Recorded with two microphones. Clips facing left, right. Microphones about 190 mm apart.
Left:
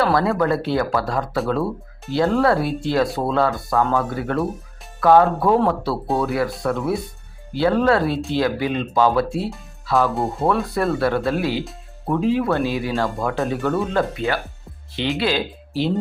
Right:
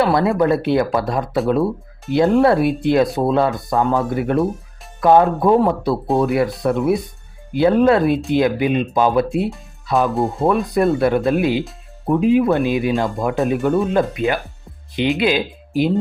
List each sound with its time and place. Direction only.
0.0 s speech: 20° right (ahead or behind)